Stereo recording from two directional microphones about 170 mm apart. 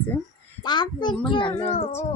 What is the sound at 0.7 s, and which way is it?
Speech, 25° left (ahead or behind).